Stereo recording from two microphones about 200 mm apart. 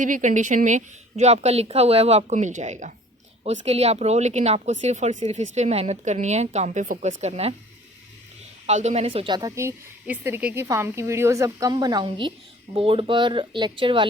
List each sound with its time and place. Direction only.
0.0 s a woman's voice: 40° right (ahead or behind)
8.6 s a woman's voice: 35° right (ahead or behind)